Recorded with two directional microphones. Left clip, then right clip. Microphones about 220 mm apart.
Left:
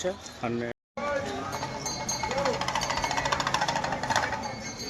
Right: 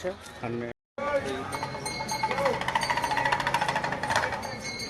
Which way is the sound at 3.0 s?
Centre (ahead or behind).